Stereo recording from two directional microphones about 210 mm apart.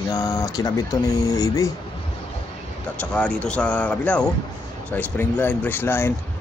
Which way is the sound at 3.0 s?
5° left (ahead or behind).